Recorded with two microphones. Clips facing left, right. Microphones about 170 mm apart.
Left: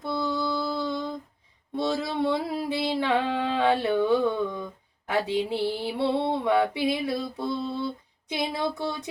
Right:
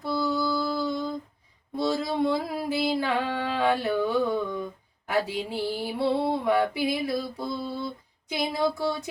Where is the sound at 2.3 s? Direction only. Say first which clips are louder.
Even; 25° left (ahead or behind).